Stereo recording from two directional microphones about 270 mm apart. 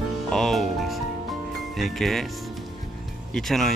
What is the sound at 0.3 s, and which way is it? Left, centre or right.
Speech, centre.